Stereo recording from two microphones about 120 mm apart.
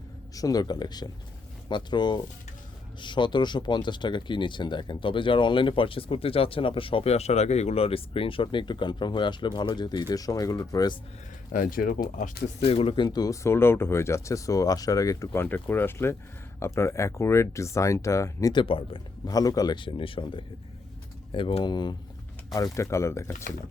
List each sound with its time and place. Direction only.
0.3 s speech: 30° left (ahead or behind)
11.5 s speech: 90° left
12.1 s speech: 75° left (ahead or behind); by 13.1 s 50° left (ahead or behind)
13.1 s speech: 35° left (ahead or behind)
18.5 s speech: 50° left (ahead or behind)
19.2 s speech: 30° left (ahead or behind)
22.5 s speech: 25° left (ahead or behind)